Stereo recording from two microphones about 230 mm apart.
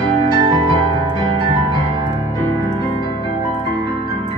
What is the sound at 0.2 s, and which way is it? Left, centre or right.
Music, right.